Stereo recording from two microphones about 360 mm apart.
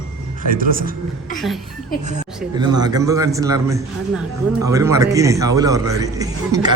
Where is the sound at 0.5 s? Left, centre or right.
Right.